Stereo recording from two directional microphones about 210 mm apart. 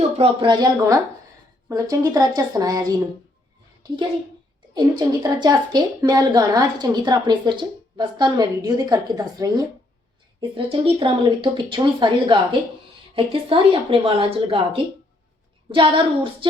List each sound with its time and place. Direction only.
0.2 s a woman's voice: 20° right (ahead or behind)
4.7 s a woman's voice: 20° right (ahead or behind)